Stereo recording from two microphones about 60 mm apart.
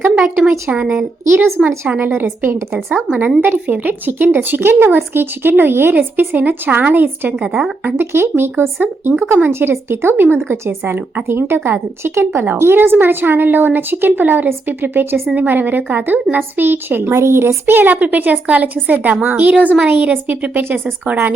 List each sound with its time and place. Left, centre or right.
0.7 s speech: right
1.3 s a woman's voice: right
2.0 s speech: right
7.3 s a woman's voice: centre
7.9 s speech: right